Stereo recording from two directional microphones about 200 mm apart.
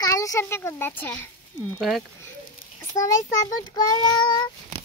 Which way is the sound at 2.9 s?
15° left (ahead or behind).